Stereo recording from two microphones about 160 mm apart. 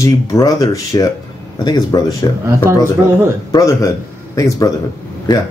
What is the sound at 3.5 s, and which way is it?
A man's voice, 20° left (ahead or behind).